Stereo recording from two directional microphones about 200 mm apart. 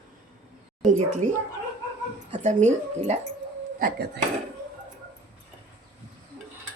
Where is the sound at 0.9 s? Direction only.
35° right (ahead or behind).